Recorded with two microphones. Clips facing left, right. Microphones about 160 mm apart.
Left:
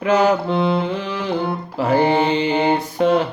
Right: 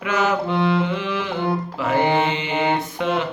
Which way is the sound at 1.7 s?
35° left (ahead or behind).